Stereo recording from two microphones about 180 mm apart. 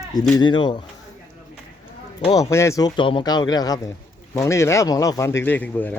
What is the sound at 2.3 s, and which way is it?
A man's voice, 15° left (ahead or behind).